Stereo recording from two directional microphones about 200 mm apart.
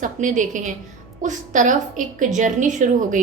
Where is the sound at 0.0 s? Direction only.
40° right (ahead or behind).